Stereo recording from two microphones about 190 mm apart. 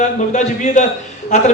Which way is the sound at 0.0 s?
40° left (ahead or behind).